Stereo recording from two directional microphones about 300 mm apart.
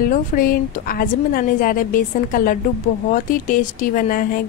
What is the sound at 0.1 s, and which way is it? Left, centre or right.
A woman's voice, left.